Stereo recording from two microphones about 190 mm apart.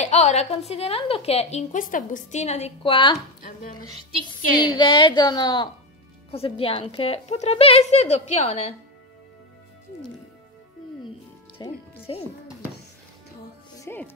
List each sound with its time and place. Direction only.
0.0 s a woman's voice: 35° left (ahead or behind)
4.6 s a woman's voice: 25° left (ahead or behind)
11.5 s music: 30° left (ahead or behind)
13.7 s music: 10° left (ahead or behind)